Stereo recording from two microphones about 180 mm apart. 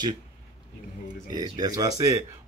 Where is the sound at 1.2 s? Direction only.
20° right (ahead or behind).